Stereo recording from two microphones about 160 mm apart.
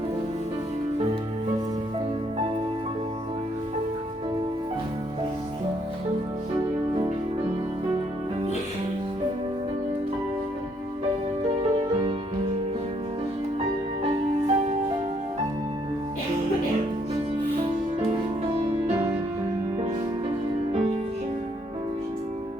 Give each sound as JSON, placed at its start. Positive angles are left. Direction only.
{"t": 14.0, "sound": "music", "side_deg": -40}